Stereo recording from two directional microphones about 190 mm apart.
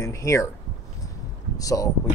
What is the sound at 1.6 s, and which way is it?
Speech, 20° left (ahead or behind).